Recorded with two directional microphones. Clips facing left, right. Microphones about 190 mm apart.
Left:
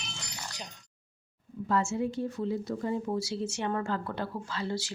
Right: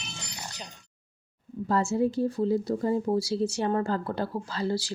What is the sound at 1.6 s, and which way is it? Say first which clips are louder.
Speech: right 4 dB; 35° right (ahead or behind).